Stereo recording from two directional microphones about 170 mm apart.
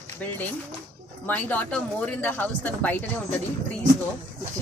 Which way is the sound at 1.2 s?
10° left (ahead or behind).